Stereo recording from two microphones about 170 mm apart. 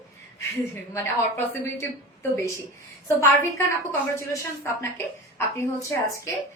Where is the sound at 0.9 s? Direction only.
15° left (ahead or behind).